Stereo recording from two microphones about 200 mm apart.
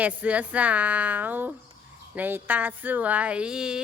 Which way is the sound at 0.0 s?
5° right (ahead or behind).